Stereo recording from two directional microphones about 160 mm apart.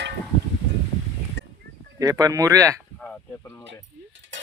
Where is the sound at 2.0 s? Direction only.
20° right (ahead or behind).